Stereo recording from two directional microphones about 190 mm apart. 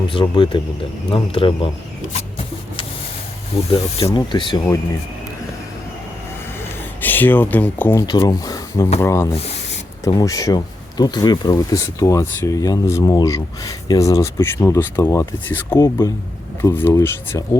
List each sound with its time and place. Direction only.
0.1 s speech: 25° left (ahead or behind)
3.5 s speech: 30° left (ahead or behind)
7.0 s speech: 10° left (ahead or behind)
8.0 s speech: 20° left (ahead or behind)
9.3 s speech: 35° left (ahead or behind)
10.0 s speech: 20° left (ahead or behind)